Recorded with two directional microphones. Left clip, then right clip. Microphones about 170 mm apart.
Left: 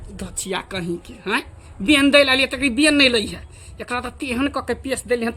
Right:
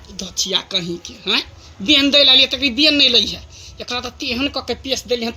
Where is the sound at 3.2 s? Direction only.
40° left (ahead or behind).